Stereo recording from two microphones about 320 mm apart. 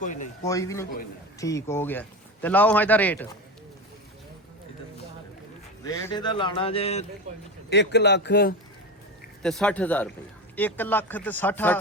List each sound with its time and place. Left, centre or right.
0.4 s speech: centre
5.8 s speech: centre
7.7 s speech: left
9.4 s speech: centre